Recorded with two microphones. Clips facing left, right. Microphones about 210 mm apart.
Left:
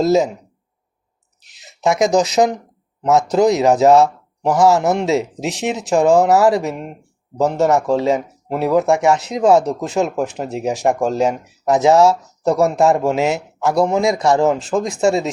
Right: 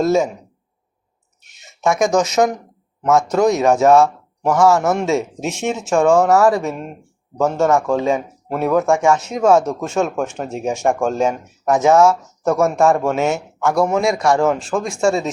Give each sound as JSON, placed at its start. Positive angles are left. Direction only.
{"t": 1.8, "sound": "a man's voice", "side_deg": 20}